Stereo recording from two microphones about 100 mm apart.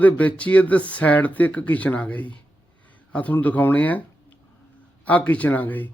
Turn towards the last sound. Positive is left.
turn(degrees=20)  # may be behind; listen again after turning